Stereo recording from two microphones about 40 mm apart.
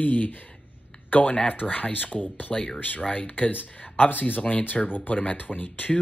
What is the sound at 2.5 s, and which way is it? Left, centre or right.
Speech, left.